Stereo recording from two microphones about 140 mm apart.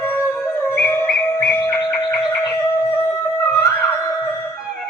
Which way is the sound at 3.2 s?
15° left (ahead or behind).